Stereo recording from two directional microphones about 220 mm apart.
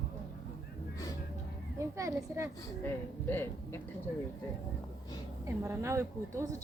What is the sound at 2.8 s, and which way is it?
Speech, 10° left (ahead or behind).